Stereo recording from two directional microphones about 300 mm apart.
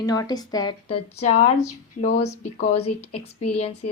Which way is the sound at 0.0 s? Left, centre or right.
Centre.